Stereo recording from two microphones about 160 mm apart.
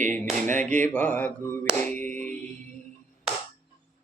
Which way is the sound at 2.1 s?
10° left (ahead or behind).